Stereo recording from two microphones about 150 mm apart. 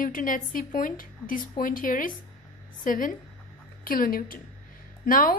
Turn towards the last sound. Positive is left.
turn(degrees=65)  # may be behind; listen again after turning